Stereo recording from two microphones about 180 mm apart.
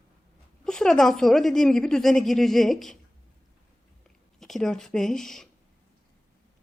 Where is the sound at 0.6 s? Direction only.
5° left (ahead or behind).